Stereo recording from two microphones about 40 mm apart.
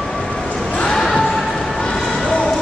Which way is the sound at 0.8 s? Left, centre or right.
Centre.